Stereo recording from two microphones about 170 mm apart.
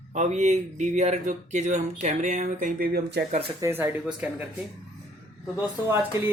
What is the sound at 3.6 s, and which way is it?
Speech, 15° right (ahead or behind).